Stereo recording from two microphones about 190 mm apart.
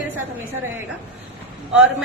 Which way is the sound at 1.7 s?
5° right (ahead or behind).